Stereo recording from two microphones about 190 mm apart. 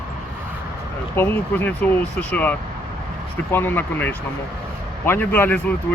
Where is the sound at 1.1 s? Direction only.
10° left (ahead or behind).